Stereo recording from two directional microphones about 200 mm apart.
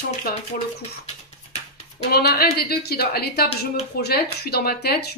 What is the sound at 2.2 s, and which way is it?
A woman's voice, 50° left (ahead or behind).